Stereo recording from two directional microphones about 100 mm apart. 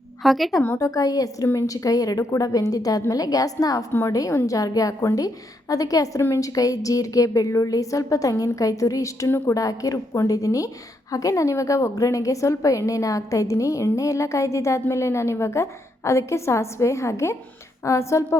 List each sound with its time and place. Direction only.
0.2 s a woman's voice: centre (ahead or behind)
0.8 s a woman's voice: 35° left (ahead or behind)